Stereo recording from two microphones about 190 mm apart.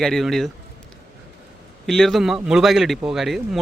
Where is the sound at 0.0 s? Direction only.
Centre (ahead or behind).